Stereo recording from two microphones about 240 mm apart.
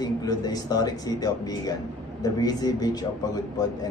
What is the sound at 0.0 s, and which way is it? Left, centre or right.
A man's voice, centre.